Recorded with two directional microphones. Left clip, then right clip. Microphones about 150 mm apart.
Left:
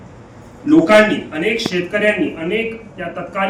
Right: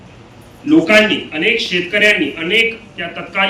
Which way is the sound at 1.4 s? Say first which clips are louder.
Right 4 dB; 15° left (ahead or behind).